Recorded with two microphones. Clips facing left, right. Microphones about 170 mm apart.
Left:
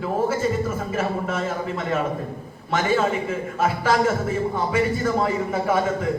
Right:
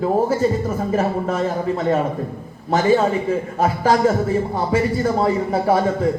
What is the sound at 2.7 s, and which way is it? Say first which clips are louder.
A man's voice: right 5 dB; 35° right (ahead or behind).